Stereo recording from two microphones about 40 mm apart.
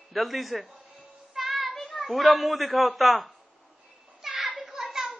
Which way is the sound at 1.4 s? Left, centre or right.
Centre.